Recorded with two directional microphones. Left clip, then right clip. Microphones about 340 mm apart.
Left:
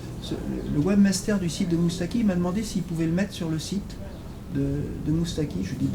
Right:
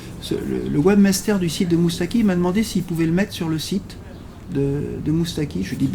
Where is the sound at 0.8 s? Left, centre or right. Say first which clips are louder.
Right 7 dB; right.